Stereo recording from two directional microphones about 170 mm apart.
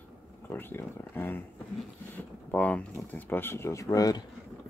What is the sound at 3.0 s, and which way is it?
Speech, 10° left (ahead or behind).